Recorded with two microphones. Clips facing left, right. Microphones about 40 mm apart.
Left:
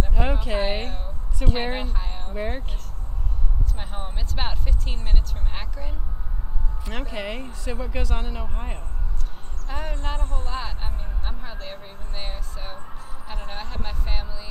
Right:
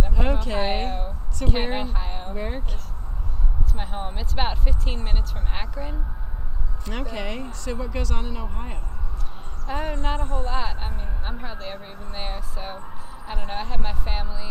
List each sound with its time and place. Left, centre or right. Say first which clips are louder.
0.1 s speech: even; centre
0.6 s speech: right 1 dB; centre
2.3 s speech: left 3 dB; centre
3.7 s speech: right 7 dB; centre
6.8 s speech: right 1 dB; centre
9.7 s speech: right 4 dB; centre
10.1 s speech: right 5 dB; right
10.5 s speech: right 3 dB; centre